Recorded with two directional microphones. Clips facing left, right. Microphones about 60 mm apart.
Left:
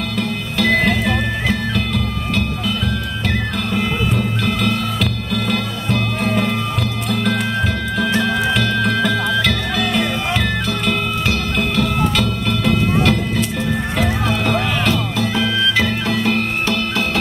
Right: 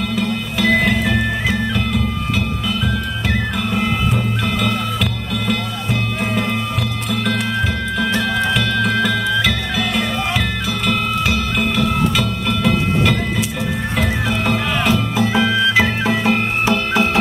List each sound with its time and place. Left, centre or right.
0.1 s music: centre
5.3 s music: centre
8.2 s music: centre
15.1 s music: centre